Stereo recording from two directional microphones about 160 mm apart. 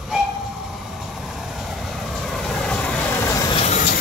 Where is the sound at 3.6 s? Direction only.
50° left (ahead or behind).